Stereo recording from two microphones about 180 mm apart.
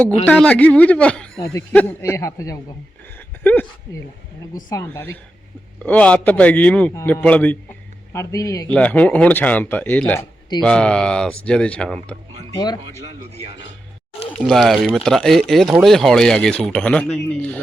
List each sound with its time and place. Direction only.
0.3 s speech: 5° left (ahead or behind)
3.2 s a sound: 10° left (ahead or behind)
4.7 s speech: 15° left (ahead or behind)
8.7 s speech: 5° left (ahead or behind)
12.5 s speech: 20° left (ahead or behind)
14.1 s a sound: 30° left (ahead or behind)
14.3 s speech: centre (ahead or behind)